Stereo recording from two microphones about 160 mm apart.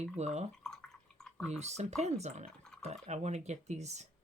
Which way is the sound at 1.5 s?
45° right (ahead or behind).